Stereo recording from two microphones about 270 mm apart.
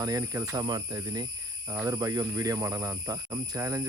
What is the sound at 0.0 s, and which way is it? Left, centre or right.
Speech, centre.